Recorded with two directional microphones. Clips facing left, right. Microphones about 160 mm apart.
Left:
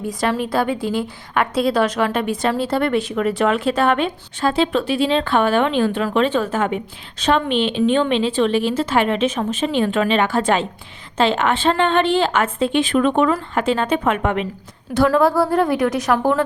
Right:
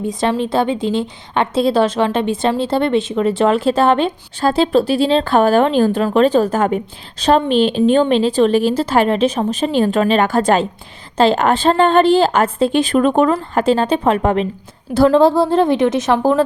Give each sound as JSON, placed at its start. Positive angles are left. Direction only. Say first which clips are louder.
{"t": 0.0, "sound": "a woman's voice", "louder": "right 3 dB", "side_deg": -25}